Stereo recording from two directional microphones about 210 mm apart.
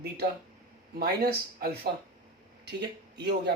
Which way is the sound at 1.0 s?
50° right (ahead or behind).